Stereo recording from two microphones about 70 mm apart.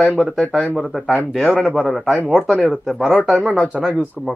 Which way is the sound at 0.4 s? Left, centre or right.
Centre.